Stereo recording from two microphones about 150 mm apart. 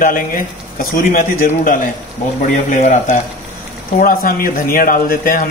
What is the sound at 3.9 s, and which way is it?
Speech, 70° left (ahead or behind).